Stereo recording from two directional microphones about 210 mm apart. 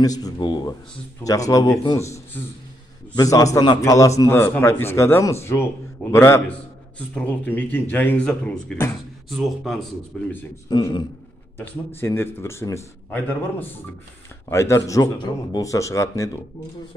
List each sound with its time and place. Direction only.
0.0 s a man's voice: 15° left (ahead or behind)
10.7 s speech: 20° left (ahead or behind)